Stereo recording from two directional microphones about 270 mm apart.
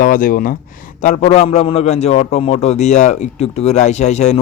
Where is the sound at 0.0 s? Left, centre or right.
Left.